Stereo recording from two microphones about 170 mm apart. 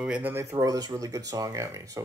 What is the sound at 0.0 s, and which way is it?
Speech, 10° right (ahead or behind).